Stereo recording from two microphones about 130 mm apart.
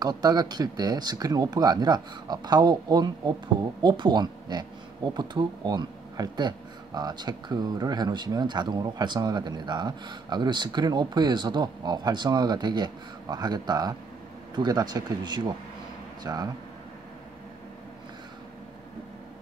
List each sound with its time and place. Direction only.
0.0 s speech: 30° right (ahead or behind)